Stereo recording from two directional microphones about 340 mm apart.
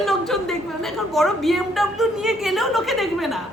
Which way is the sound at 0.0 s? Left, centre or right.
Centre.